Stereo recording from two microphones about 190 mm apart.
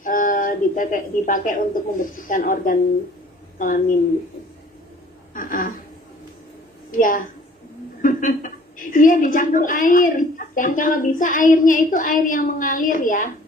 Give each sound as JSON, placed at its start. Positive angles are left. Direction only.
{"t": 0.0, "sound": "a woman's voice", "side_deg": 45}
{"t": 5.3, "sound": "speech", "side_deg": 45}
{"t": 6.9, "sound": "a woman's voice", "side_deg": 45}